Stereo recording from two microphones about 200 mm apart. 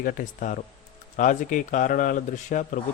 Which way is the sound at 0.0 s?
40° left (ahead or behind).